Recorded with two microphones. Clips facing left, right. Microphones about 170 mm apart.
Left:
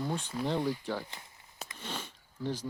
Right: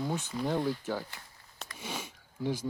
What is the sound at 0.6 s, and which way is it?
Speech, 10° left (ahead or behind).